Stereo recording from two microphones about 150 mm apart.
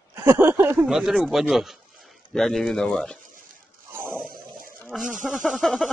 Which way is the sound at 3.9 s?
15° right (ahead or behind).